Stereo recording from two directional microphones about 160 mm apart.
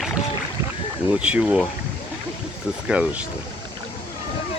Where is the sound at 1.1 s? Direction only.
5° right (ahead or behind).